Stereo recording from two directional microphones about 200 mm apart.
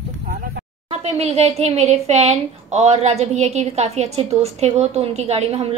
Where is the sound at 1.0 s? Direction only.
30° right (ahead or behind).